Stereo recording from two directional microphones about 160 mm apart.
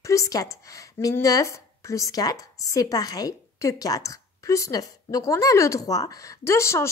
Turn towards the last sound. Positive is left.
turn(degrees=15)  # may be behind; listen again after turning